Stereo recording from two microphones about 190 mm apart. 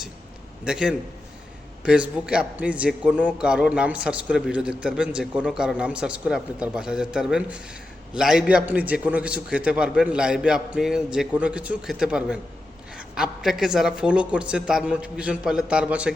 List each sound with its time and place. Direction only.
0.6 s a man's voice: 5° right (ahead or behind)